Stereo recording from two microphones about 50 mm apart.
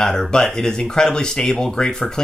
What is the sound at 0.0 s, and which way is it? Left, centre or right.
Speech, centre.